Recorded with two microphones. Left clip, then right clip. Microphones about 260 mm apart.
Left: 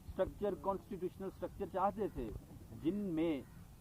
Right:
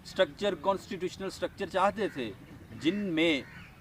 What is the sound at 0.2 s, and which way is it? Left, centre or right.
Speech, right.